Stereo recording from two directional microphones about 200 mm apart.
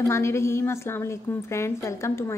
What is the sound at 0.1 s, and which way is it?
A woman's voice, 15° left (ahead or behind).